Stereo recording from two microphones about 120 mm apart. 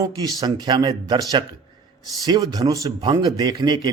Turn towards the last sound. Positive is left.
turn(degrees=-35)  # may be behind; listen again after turning